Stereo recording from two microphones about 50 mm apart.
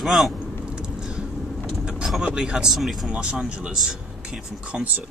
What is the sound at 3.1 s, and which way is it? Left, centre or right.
Speech, centre.